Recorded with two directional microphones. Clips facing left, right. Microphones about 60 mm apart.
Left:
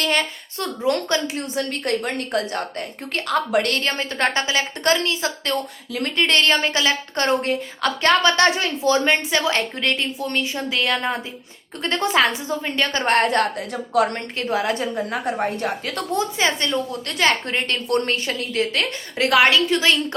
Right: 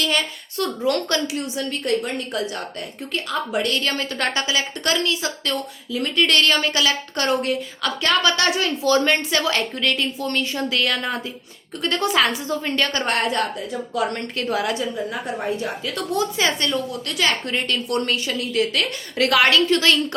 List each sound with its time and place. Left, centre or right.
0.0 s a sound: left
0.8 s a woman's voice: left
1.4 s a woman's voice: left
3.8 s a woman's voice: left
5.9 s a woman's voice: left
6.1 s a woman's voice: left
10.2 s a woman's voice: centre; by 14.1 s left
14.1 s a woman's voice: left
14.8 s a woman's voice: left
16.1 s a woman's voice: left